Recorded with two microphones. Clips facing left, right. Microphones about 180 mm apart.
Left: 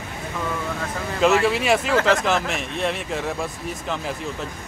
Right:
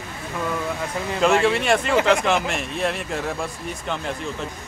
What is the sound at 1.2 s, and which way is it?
Speech, centre (ahead or behind).